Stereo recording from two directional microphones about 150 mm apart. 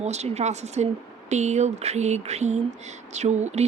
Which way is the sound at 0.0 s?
50° right (ahead or behind).